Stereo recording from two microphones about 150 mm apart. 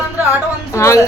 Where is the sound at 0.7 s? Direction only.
20° left (ahead or behind).